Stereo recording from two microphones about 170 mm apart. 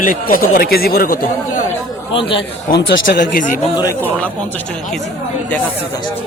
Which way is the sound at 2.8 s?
80° left.